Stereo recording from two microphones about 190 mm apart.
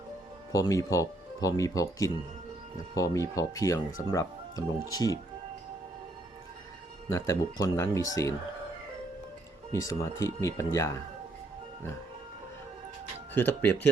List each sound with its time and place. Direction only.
0.5 s speech: 20° left (ahead or behind)
7.1 s speech: 15° left (ahead or behind)
9.8 s speech: 15° left (ahead or behind)
13.3 s speech: 10° left (ahead or behind)